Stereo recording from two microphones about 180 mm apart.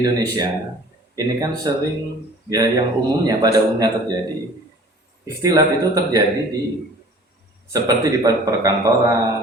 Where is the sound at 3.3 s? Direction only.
20° right (ahead or behind).